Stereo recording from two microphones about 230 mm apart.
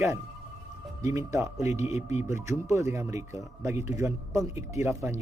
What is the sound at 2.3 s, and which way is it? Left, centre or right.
A man's voice, centre.